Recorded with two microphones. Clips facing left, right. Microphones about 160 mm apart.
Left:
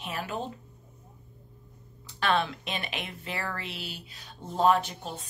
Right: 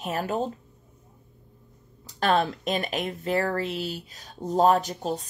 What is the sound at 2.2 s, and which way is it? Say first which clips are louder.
Speech: right 4 dB; 40° right (ahead or behind).